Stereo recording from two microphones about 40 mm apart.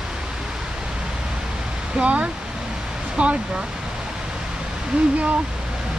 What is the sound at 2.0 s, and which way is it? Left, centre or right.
Speech, right.